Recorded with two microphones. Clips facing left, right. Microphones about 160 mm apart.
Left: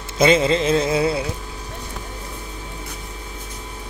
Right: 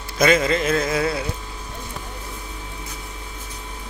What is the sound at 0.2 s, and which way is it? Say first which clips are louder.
Carnatic music: left 2 dB; 25° left (ahead or behind).